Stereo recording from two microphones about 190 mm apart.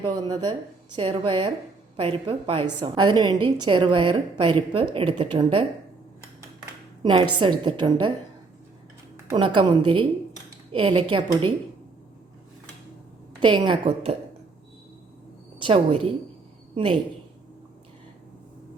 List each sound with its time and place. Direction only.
0.0 s a woman's voice: 20° right (ahead or behind)
7.0 s a woman's voice: 25° right (ahead or behind)
9.3 s a woman's voice: 25° right (ahead or behind)
13.4 s a woman's voice: 25° right (ahead or behind)
15.5 s a woman's voice: 30° right (ahead or behind)